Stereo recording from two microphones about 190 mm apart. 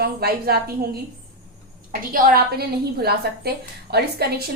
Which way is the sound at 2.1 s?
50° right (ahead or behind).